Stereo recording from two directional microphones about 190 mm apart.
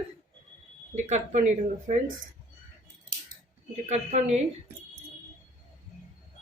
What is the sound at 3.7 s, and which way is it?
Speech, 35° right (ahead or behind).